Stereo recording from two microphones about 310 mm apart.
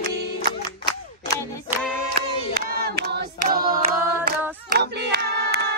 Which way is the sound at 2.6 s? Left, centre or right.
Right.